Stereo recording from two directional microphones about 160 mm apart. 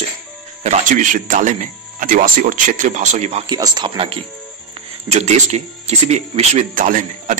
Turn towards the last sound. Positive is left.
turn(degrees=-55)  # may be behind; listen again after turning